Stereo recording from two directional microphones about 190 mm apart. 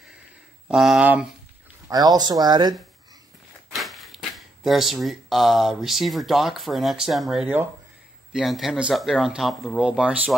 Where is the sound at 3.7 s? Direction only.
Centre (ahead or behind).